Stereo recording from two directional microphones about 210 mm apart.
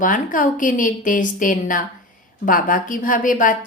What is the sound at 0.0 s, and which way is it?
A woman's voice, 40° left (ahead or behind).